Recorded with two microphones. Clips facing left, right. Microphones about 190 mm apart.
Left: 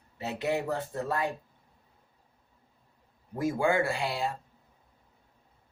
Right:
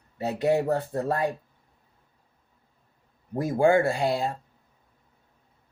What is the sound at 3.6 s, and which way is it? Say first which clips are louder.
Speech: right 8 dB; 45° right (ahead or behind).